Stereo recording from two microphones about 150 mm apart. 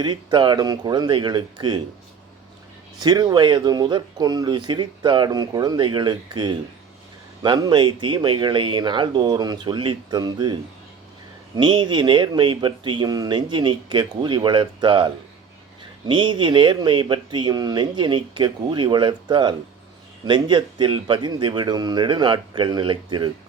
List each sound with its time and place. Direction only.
0.0 s speech: 30° right (ahead or behind)
3.0 s speech: 25° right (ahead or behind)